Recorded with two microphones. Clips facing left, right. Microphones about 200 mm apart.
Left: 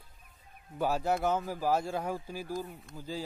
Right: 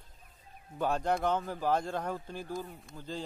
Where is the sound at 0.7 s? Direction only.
5° left (ahead or behind).